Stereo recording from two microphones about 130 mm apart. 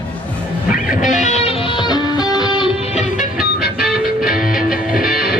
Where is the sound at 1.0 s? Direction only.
65° left (ahead or behind); by 2.7 s 35° left (ahead or behind).